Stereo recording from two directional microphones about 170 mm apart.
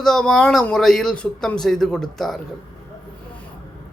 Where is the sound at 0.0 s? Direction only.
Centre (ahead or behind).